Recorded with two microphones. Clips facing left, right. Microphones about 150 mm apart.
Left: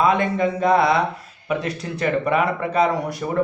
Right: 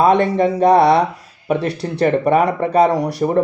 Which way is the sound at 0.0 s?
35° right (ahead or behind).